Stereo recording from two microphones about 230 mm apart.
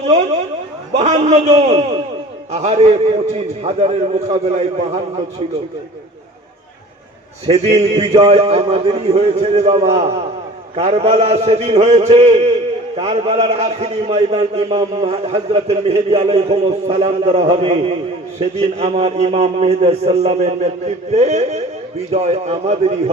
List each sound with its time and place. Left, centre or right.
0.9 s a man's voice: right
7.4 s a man's voice: right